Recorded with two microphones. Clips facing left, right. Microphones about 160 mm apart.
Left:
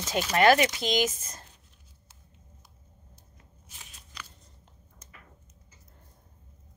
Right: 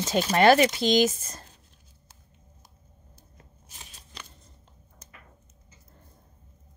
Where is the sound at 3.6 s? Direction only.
35° right (ahead or behind).